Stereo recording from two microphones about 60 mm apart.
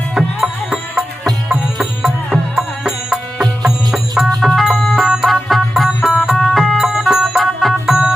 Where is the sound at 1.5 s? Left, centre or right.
Centre.